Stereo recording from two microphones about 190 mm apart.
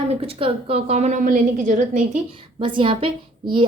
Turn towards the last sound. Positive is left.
turn(degrees=-25)  # may be behind; listen again after turning